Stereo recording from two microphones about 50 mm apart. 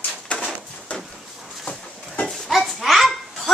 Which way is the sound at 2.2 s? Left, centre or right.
Centre.